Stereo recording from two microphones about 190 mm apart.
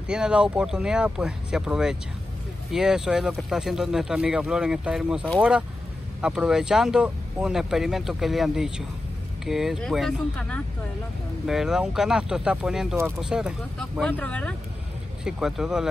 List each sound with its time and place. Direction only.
0.1 s speech: 5° right (ahead or behind)